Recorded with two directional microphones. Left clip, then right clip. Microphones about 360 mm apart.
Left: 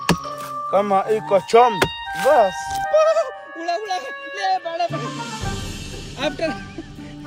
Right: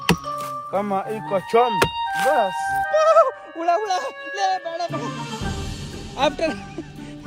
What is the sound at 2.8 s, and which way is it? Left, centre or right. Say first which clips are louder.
Speech: right 1 dB; centre.